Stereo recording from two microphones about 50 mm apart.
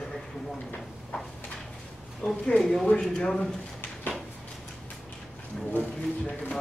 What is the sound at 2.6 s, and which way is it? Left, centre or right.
Speech, centre.